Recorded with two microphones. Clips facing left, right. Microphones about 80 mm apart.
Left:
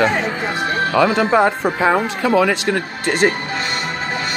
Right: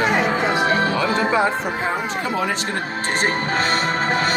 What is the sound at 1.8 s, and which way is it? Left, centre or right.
Speech, left.